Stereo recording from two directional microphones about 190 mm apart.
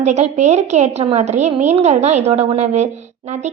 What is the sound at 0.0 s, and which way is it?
A woman's voice, 35° right (ahead or behind).